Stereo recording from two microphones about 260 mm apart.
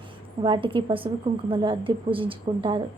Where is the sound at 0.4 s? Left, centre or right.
Centre.